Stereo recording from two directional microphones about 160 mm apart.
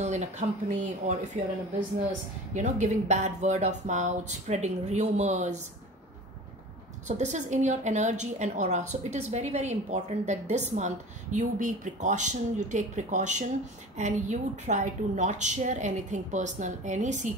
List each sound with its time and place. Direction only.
0.0 s a woman's voice: 45° right (ahead or behind)
2.5 s a woman's voice: 50° right (ahead or behind)
7.1 s a woman's voice: 50° right (ahead or behind)